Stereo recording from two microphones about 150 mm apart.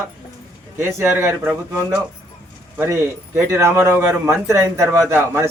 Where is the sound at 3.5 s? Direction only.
15° right (ahead or behind).